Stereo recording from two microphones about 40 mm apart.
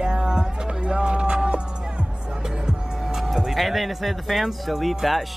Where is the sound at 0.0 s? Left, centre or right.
Centre.